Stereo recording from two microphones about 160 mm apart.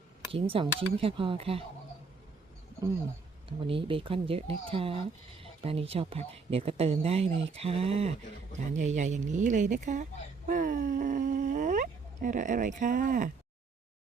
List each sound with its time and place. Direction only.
0.3 s speech: 35° right (ahead or behind)
3.7 s speech: 35° right (ahead or behind); by 10.1 s 50° right (ahead or behind)
10.4 s groan: 55° right (ahead or behind)